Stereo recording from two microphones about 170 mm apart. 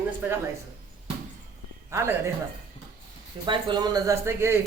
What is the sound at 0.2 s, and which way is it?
Speech, 10° right (ahead or behind).